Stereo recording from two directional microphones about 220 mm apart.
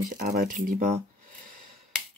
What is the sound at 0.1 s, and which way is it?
Speech, 40° right (ahead or behind).